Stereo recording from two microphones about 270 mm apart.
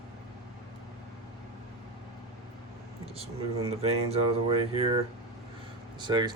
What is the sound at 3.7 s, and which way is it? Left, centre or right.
Speech, right.